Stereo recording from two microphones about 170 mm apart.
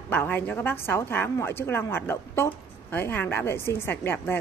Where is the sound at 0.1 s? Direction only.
15° left (ahead or behind).